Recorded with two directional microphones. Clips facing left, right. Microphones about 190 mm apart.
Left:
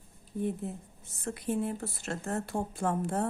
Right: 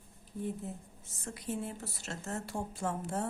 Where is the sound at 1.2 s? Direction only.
60° left (ahead or behind).